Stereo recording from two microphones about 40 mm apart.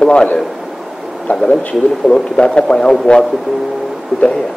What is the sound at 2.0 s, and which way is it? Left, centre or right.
A man's voice, centre.